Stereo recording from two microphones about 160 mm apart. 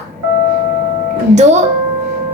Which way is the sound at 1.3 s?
45° right (ahead or behind).